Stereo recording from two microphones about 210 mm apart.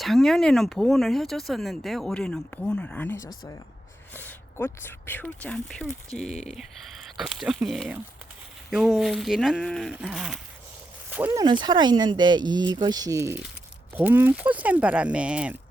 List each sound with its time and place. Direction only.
0.0 s speech: centre (ahead or behind)